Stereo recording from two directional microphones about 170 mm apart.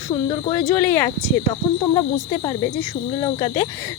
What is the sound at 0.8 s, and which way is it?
Cricket, 10° left (ahead or behind).